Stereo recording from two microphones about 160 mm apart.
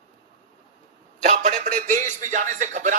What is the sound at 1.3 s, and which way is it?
Speech, 50° right (ahead or behind).